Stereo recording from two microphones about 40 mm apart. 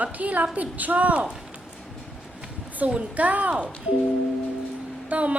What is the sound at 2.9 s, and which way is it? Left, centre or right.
Speech, right.